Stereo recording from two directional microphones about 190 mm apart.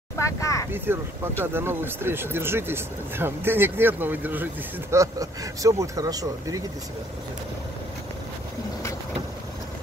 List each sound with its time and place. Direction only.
0.2 s vehicle: 15° left (ahead or behind)
0.7 s speech: 10° right (ahead or behind)